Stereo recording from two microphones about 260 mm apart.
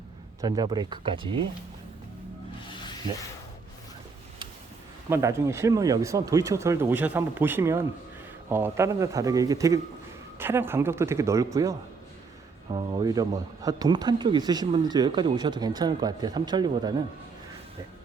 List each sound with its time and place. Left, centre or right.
0.4 s speech: centre
5.0 s speech: centre